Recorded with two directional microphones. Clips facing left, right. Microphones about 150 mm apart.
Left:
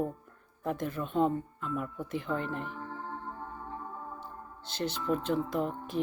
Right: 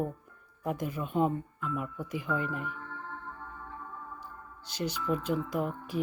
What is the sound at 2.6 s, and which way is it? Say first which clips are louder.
Music: left 1 dB; 35° left (ahead or behind).